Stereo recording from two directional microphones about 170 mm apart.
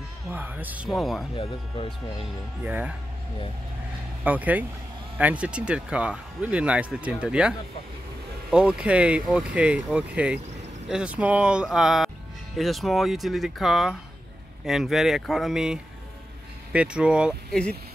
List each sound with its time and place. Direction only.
0.3 s speech: 10° right (ahead or behind)
1.3 s speech: 30° left (ahead or behind)
2.6 s speech: 10° right (ahead or behind)
4.2 s speech: 10° right (ahead or behind)